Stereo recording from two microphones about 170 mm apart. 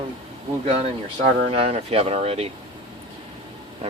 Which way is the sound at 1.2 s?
35° right (ahead or behind).